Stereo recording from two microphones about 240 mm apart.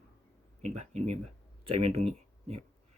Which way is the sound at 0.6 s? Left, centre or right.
Right.